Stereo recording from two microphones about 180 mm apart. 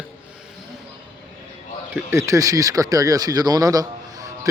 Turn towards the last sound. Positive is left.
turn(degrees=-20)  # may be behind; listen again after turning